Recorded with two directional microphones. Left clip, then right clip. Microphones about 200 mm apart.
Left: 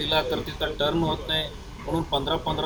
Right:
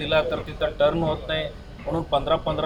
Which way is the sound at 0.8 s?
Centre (ahead or behind).